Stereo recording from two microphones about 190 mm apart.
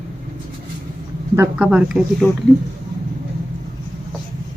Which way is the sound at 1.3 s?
10° right (ahead or behind).